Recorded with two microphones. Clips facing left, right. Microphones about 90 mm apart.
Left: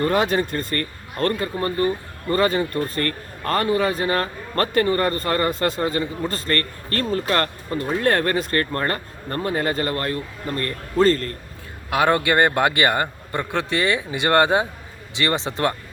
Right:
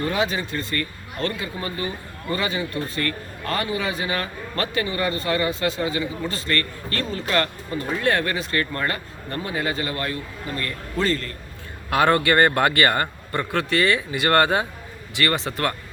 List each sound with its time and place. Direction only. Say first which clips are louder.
0.0 s a man's voice: left 4 dB; 50° left (ahead or behind)
11.9 s a man's voice: even; 10° left (ahead or behind)